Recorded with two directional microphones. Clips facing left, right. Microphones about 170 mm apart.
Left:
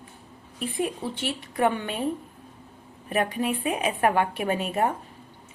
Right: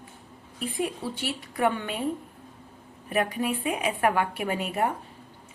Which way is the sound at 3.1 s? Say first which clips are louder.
Left 1 dB; 25° left (ahead or behind).